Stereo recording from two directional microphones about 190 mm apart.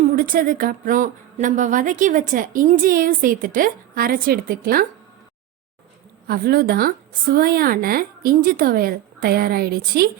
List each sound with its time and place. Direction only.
0.2 s speech: 50° right (ahead or behind)
6.2 s speech: 50° right (ahead or behind)